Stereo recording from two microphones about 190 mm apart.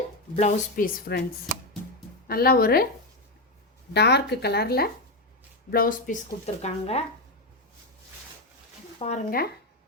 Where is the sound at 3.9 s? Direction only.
60° left (ahead or behind); by 6.2 s 45° left (ahead or behind).